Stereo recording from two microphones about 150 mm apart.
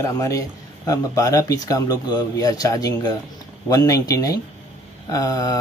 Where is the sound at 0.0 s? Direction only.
20° left (ahead or behind).